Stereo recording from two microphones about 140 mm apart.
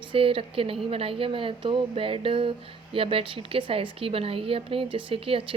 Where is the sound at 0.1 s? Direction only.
40° right (ahead or behind).